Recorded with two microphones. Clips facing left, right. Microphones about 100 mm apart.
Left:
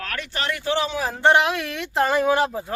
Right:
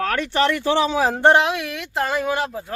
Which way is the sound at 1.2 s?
35° right (ahead or behind).